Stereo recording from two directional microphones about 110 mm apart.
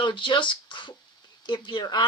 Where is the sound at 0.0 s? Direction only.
45° left (ahead or behind).